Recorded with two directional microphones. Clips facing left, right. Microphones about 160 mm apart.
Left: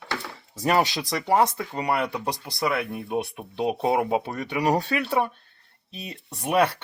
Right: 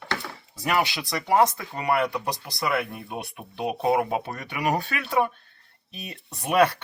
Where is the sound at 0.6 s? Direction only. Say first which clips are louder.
Left 3 dB; 35° left (ahead or behind).